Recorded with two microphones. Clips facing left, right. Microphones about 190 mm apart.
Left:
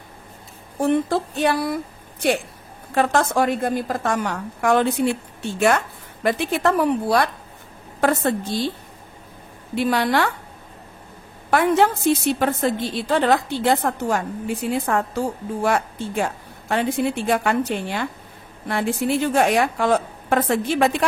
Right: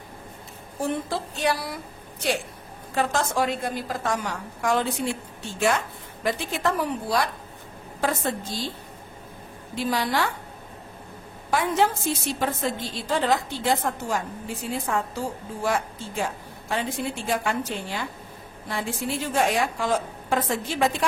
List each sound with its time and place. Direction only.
0.7 s a woman's voice: 60° left (ahead or behind)
2.9 s a woman's voice: 60° left (ahead or behind)
9.8 s a woman's voice: 65° left (ahead or behind)
11.5 s a woman's voice: 60° left (ahead or behind)